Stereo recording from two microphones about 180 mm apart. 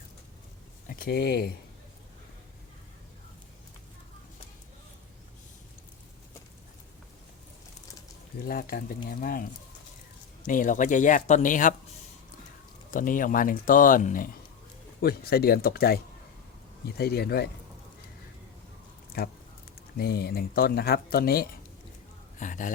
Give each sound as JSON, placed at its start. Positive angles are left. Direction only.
{"t": 0.9, "sound": "speech", "side_deg": 55}
{"t": 8.4, "sound": "speech", "side_deg": 55}
{"t": 12.9, "sound": "speech", "side_deg": 50}
{"t": 15.0, "sound": "speech", "side_deg": 60}
{"t": 17.0, "sound": "speech", "side_deg": 60}
{"t": 19.2, "sound": "speech", "side_deg": 60}
{"t": 22.4, "sound": "speech", "side_deg": 45}